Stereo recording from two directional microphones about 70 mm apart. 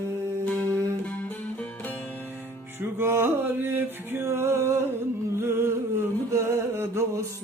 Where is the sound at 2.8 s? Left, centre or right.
Right.